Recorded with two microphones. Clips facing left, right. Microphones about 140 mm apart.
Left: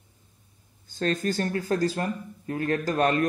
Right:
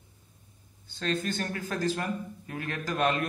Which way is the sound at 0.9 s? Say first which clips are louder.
Left 4 dB; 40° left (ahead or behind).